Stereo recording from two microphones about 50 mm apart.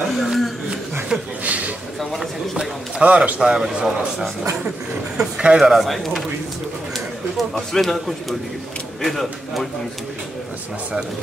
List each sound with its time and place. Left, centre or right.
0.1 s a sound: centre
1.4 s a sound: right
2.0 s a man's voice: centre
3.0 s speech: right
3.3 s speech: centre
5.6 s a man's voice: centre
7.7 s a man's voice: centre